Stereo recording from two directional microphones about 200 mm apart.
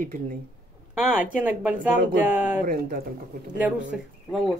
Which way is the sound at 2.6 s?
45° right (ahead or behind).